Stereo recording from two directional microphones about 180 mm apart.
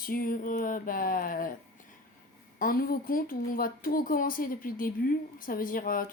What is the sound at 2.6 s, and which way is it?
Speech, 55° left (ahead or behind).